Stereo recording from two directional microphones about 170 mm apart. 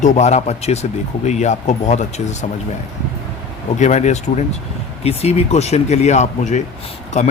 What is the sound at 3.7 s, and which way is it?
Speech, 45° left (ahead or behind).